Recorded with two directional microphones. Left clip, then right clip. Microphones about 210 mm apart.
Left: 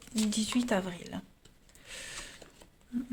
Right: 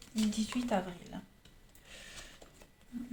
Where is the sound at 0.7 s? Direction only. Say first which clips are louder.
Left 3 dB; 55° left (ahead or behind).